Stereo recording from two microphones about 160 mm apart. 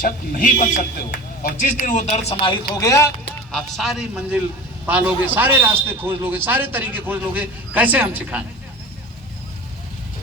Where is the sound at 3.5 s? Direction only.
5° left (ahead or behind).